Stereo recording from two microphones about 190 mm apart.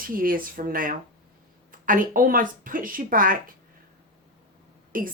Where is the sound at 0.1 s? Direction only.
50° right (ahead or behind).